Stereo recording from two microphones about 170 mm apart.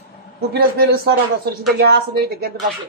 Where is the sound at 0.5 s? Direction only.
65° right (ahead or behind).